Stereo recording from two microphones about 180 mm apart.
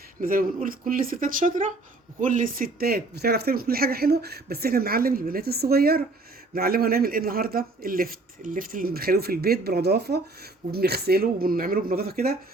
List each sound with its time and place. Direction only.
0.2 s speech: 50° right (ahead or behind)